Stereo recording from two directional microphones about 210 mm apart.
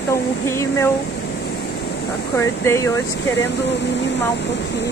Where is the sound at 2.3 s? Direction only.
10° left (ahead or behind).